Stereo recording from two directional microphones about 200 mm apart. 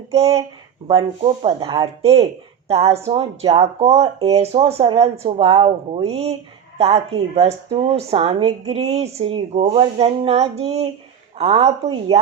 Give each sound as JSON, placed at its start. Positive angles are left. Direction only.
{"t": 0.1, "sound": "speech", "side_deg": -30}